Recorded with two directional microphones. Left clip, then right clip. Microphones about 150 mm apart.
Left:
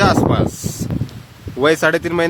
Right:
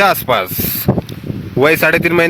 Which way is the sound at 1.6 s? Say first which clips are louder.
Right 4 dB; 30° right (ahead or behind).